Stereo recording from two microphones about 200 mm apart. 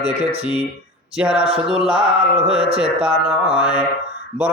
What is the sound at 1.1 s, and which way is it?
Music, 5° right (ahead or behind).